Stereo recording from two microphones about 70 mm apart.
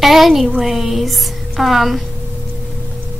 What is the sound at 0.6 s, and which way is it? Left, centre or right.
A woman's voice, centre.